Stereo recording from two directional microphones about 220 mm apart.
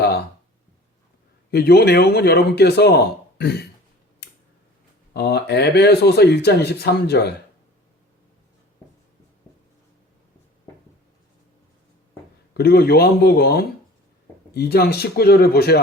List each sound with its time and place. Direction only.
1.5 s speech: 45° left (ahead or behind)
4.2 s scissors: 50° left (ahead or behind)
5.1 s speech: 50° left (ahead or behind)
12.5 s speech: 45° left (ahead or behind)